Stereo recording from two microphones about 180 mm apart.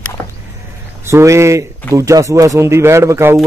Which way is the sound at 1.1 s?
15° right (ahead or behind).